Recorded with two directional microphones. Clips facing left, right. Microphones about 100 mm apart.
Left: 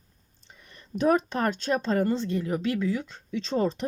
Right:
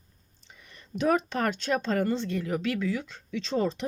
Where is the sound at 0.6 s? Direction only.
40° left (ahead or behind).